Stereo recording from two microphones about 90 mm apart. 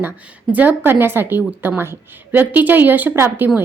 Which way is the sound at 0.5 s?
20° right (ahead or behind).